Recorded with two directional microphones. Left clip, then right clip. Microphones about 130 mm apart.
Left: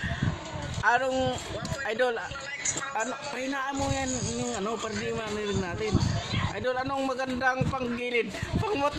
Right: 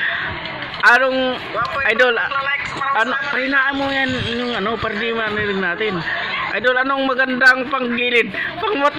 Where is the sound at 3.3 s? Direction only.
30° left (ahead or behind).